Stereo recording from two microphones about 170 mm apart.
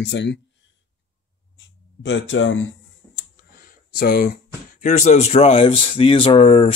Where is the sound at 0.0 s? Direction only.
90° left.